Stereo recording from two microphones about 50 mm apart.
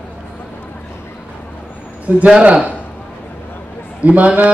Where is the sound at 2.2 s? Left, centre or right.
Right.